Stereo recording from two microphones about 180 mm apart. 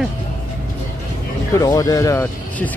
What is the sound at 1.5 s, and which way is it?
Vehicle, 20° left (ahead or behind).